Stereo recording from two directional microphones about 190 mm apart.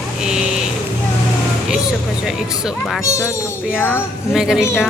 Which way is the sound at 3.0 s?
15° left (ahead or behind).